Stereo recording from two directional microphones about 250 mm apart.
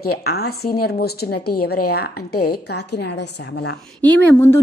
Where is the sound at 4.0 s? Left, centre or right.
Centre.